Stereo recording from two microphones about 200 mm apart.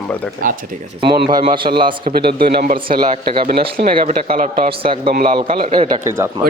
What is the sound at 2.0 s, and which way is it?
Speech, 50° right (ahead or behind).